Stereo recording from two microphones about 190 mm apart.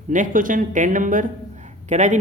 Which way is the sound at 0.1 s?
45° right (ahead or behind).